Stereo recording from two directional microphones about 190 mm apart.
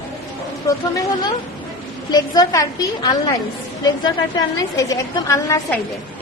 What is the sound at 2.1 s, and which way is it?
A woman's voice, 20° left (ahead or behind).